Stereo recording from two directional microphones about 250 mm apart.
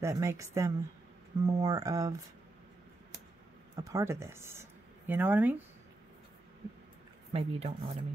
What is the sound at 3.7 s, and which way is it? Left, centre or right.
Speech, centre.